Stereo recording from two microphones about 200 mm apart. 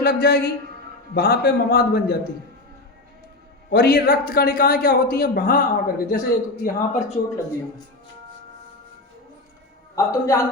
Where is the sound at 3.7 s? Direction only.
50° left (ahead or behind).